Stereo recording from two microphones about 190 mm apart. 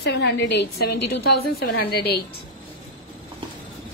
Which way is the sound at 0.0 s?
65° left (ahead or behind).